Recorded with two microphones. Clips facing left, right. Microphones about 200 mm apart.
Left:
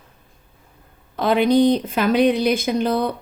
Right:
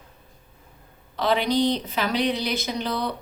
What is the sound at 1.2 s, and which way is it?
A woman's voice, 50° left (ahead or behind).